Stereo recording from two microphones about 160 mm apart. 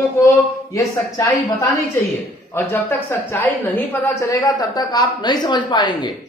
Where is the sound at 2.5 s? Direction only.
15° left (ahead or behind).